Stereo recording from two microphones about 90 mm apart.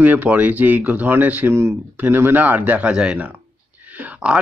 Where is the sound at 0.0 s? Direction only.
20° right (ahead or behind).